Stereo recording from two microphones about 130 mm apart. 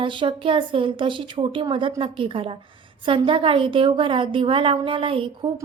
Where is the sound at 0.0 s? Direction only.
40° right (ahead or behind).